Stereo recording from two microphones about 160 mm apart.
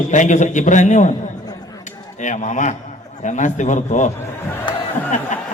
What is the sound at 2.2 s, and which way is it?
A man's voice, 50° left (ahead or behind).